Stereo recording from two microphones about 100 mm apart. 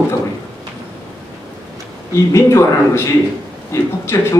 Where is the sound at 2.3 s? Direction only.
30° left (ahead or behind).